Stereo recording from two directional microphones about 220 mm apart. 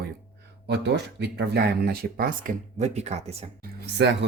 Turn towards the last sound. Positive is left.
turn(degrees=-50)  # may be behind; listen again after turning